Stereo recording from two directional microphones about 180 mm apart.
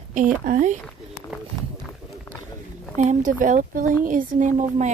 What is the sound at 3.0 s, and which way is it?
Speech, 45° right (ahead or behind).